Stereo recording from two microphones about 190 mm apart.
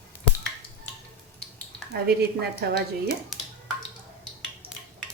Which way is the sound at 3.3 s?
Centre (ahead or behind).